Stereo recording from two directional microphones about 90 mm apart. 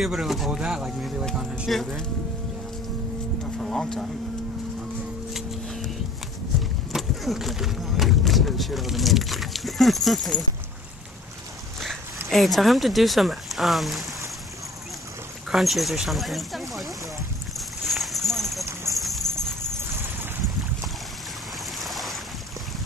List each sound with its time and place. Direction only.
0.0 s speech: 5° right (ahead or behind)
3.5 s speech: 5° left (ahead or behind)
5.3 s a sound: centre (ahead or behind)
6.9 s speech: centre (ahead or behind)
12.3 s speech: centre (ahead or behind)
15.5 s speech: centre (ahead or behind)
17.6 s a sound: centre (ahead or behind)
19.8 s a sound: 25° right (ahead or behind)
21.7 s waves: centre (ahead or behind)